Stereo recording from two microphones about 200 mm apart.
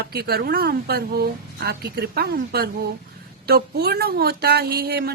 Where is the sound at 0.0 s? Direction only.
55° right (ahead or behind).